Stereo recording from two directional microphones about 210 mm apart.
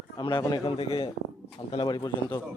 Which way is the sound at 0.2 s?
20° left (ahead or behind).